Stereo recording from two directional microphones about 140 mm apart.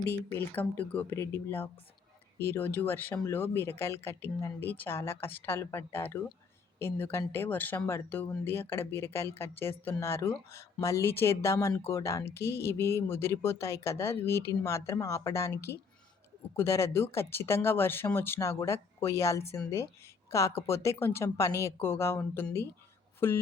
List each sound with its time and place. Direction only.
0.1 s speech: 15° left (ahead or behind)